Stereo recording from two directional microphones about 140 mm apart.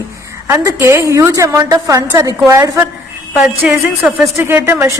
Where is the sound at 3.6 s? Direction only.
10° right (ahead or behind).